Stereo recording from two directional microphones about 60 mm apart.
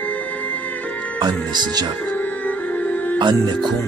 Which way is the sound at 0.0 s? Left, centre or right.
Left.